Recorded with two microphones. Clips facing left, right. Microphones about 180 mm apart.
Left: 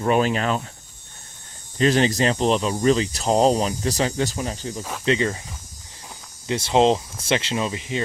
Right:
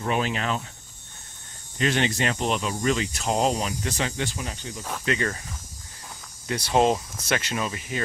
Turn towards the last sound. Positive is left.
turn(degrees=20)  # may be behind; listen again after turning